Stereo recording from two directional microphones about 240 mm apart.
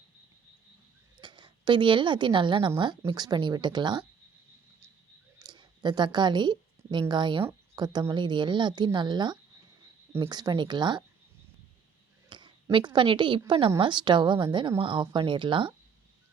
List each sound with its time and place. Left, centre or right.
1.2 s a woman's voice: centre
5.4 s a woman's voice: centre
12.3 s a woman's voice: centre